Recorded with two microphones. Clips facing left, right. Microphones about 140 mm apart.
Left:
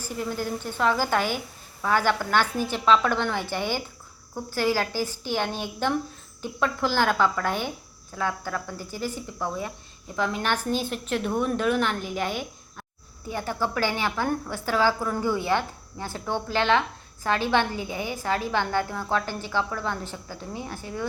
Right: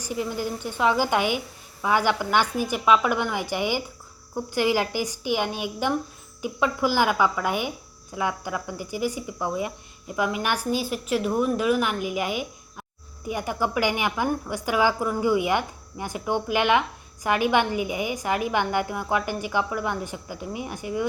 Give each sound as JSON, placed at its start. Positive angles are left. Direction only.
{"t": 0.0, "sound": "a woman's voice", "side_deg": -10}